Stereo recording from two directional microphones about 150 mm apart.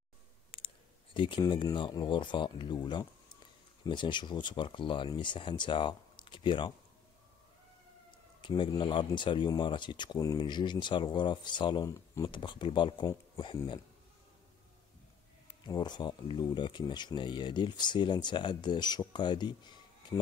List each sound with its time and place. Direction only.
0.5 s clicking: 35° left (ahead or behind)
1.1 s speech: 35° left (ahead or behind)
8.4 s speech: 30° left (ahead or behind)
15.6 s speech: 30° left (ahead or behind)